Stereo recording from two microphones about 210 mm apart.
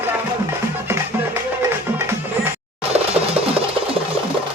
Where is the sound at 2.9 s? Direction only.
30° right (ahead or behind).